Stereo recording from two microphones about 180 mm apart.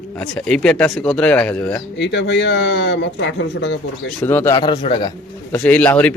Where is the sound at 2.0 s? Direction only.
75° left (ahead or behind).